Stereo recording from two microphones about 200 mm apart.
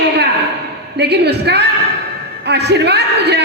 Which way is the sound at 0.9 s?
55° right (ahead or behind).